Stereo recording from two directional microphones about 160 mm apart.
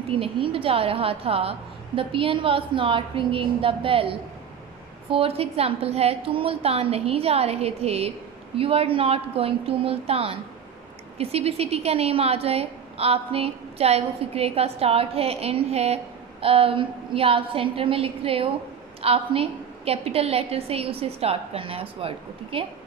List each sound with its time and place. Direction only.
0.1 s a woman's voice: 35° right (ahead or behind)